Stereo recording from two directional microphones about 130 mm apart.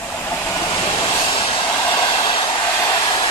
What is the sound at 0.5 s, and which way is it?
Train, 25° left (ahead or behind).